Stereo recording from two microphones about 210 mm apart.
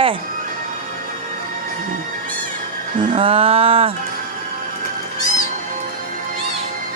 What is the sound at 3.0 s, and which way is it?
Speech, 25° right (ahead or behind).